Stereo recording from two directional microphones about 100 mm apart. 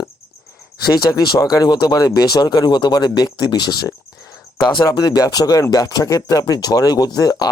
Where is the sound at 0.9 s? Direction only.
45° left (ahead or behind).